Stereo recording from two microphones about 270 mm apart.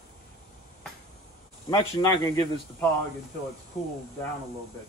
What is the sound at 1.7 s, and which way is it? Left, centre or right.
Speech, centre.